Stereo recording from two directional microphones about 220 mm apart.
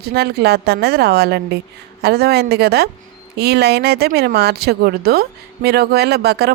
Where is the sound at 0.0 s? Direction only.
45° right (ahead or behind).